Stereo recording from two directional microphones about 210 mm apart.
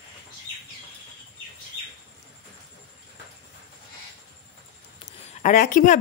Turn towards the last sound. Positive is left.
turn(degrees=40)  # may be behind; listen again after turning